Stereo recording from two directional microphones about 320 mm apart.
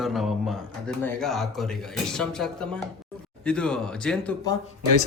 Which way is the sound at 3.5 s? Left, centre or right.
Centre.